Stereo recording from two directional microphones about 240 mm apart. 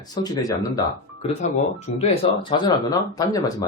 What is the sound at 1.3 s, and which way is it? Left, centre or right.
Speech, left.